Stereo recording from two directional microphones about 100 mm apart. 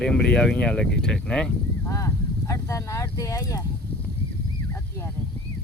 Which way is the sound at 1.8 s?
30° left (ahead or behind).